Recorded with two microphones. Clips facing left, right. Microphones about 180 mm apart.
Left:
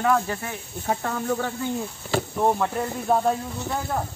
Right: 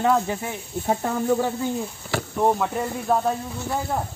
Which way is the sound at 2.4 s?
5° right (ahead or behind).